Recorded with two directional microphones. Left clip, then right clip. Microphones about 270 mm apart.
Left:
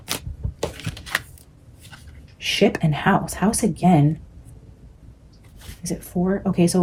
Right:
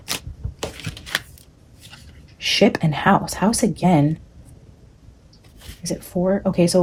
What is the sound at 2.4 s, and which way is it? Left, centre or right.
Speech, right.